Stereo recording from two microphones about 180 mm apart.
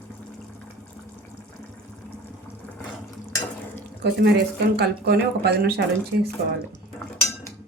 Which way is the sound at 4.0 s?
65° right (ahead or behind).